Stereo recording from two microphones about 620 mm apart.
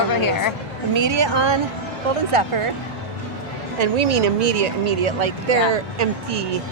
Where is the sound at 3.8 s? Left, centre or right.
Right.